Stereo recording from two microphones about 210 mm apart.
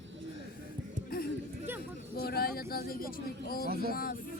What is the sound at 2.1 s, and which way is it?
Speech, 45° left (ahead or behind).